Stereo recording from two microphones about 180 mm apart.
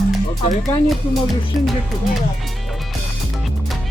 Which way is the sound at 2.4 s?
Centre (ahead or behind).